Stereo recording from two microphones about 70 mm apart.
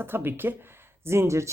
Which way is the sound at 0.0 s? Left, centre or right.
Right.